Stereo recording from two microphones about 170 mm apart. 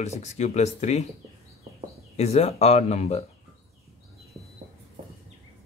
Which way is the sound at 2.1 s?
40° left (ahead or behind).